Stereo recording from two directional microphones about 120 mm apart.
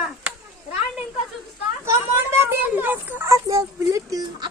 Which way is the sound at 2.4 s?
15° right (ahead or behind).